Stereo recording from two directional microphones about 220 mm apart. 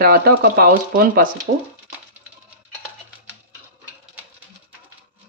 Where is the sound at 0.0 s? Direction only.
45° right (ahead or behind).